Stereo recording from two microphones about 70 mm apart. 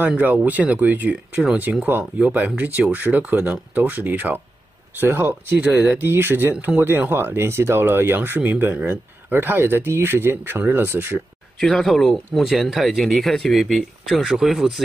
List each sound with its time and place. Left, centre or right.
0.1 s speech: centre
5.6 s speech: centre
6.0 s speech: right
11.6 s speech: centre